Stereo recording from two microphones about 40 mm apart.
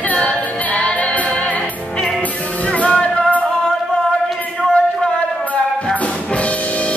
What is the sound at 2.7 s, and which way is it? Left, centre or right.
Music, left.